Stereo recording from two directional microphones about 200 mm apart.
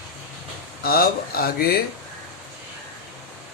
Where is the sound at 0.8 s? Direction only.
50° left (ahead or behind).